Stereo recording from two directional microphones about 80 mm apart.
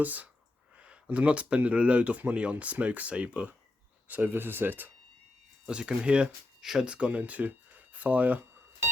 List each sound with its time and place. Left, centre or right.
0.0 s speech: centre
5.6 s speech: centre